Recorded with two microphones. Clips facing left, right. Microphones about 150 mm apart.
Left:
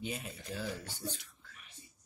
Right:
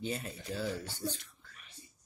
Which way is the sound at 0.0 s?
10° left (ahead or behind).